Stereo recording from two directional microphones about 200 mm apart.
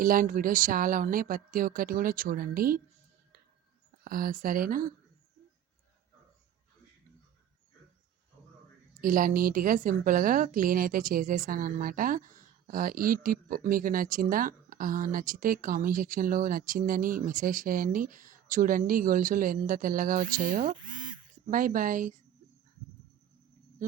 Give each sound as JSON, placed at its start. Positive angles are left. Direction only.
{"t": 0.0, "sound": "a woman's voice", "side_deg": -45}
{"t": 4.0, "sound": "a woman's voice", "side_deg": -45}
{"t": 9.0, "sound": "a woman's voice", "side_deg": -45}